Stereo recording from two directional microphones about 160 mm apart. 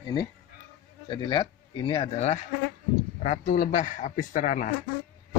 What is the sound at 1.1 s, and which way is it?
Speech, 30° left (ahead or behind).